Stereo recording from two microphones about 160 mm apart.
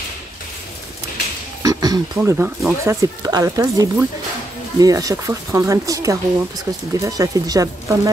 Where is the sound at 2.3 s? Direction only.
10° right (ahead or behind).